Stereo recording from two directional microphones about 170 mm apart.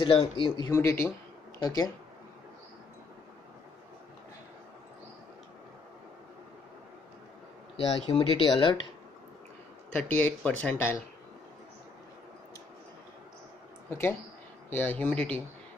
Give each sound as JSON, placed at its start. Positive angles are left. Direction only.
{"t": 0.0, "sound": "speech", "side_deg": 30}
{"t": 7.7, "sound": "speech", "side_deg": 35}
{"t": 9.9, "sound": "speech", "side_deg": 10}
{"t": 13.8, "sound": "speech", "side_deg": 15}